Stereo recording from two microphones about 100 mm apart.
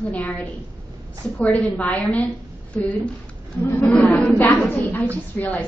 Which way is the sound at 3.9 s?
10° left (ahead or behind).